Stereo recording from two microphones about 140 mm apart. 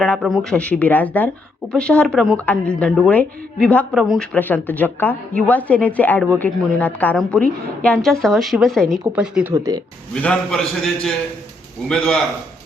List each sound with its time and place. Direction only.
0.5 s a woman's voice: 10° left (ahead or behind)
4.3 s a woman's voice: 15° left (ahead or behind); by 9.5 s 5° right (ahead or behind)
9.5 s speech: 25° right (ahead or behind)
10.2 s a woman's voice: 5° left (ahead or behind)